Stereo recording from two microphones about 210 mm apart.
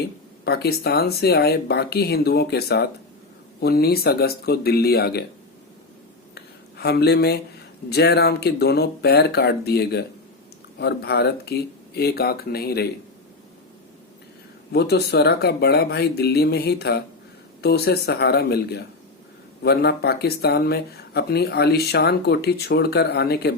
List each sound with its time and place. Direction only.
0.4 s speech: 50° left (ahead or behind)
6.3 s a sound: 50° left (ahead or behind)
7.9 s speech: 50° left (ahead or behind)
14.7 s speech: 50° left (ahead or behind)